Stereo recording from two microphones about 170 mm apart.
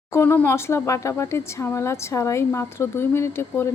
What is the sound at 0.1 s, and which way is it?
Speech, 15° left (ahead or behind).